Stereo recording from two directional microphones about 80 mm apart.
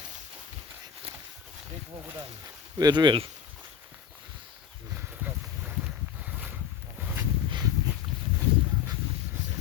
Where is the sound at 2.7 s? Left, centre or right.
Right.